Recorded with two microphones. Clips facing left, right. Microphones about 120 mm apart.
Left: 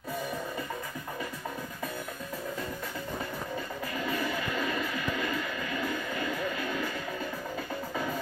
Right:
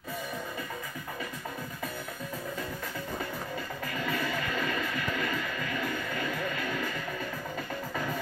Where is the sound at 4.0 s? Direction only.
15° left (ahead or behind).